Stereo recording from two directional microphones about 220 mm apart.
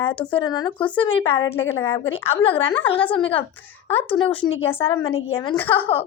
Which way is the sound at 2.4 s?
25° left (ahead or behind).